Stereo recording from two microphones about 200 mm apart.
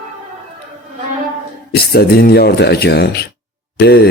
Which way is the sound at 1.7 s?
50° left (ahead or behind).